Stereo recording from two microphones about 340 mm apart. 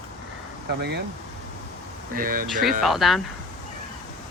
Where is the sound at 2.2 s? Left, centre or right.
Right.